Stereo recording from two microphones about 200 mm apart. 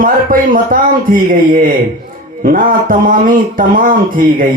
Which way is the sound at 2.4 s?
45° right (ahead or behind).